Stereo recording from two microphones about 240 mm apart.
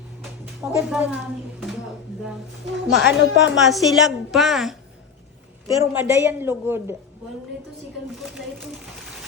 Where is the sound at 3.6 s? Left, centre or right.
Centre.